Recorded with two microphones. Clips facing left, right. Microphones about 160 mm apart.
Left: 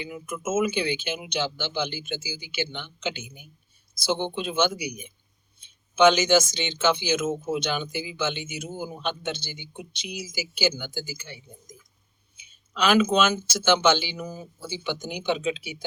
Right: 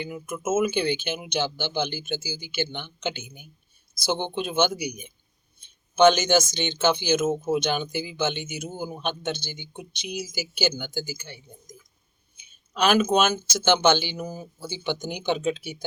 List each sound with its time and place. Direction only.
0.0 s speech: 50° right (ahead or behind)
12.4 s speech: 50° right (ahead or behind)